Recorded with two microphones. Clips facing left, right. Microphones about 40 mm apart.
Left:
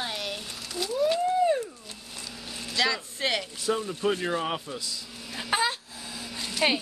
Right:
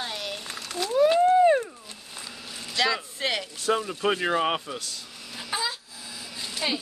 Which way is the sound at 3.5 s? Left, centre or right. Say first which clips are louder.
Right 2 dB; right.